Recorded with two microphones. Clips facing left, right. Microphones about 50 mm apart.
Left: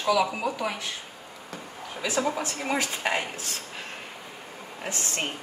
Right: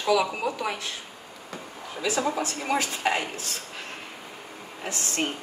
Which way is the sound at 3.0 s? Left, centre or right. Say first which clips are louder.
Right 2 dB; centre.